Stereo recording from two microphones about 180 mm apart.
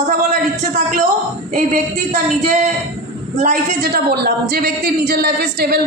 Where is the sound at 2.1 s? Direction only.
40° right (ahead or behind).